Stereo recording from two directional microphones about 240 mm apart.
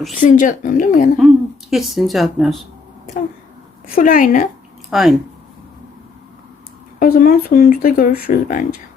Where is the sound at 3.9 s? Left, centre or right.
Left.